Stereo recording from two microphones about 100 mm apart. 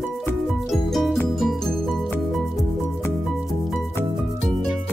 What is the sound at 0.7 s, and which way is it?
Music, centre (ahead or behind).